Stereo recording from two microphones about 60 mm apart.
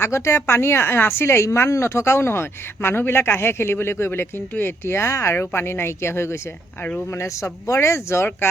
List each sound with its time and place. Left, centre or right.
0.0 s a woman's voice: left